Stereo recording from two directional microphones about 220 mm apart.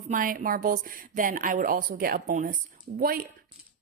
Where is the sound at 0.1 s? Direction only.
40° right (ahead or behind).